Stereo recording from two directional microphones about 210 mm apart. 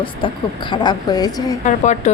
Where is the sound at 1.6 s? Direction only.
35° left (ahead or behind).